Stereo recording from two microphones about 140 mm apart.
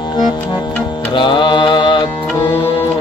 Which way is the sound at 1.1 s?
35° left (ahead or behind).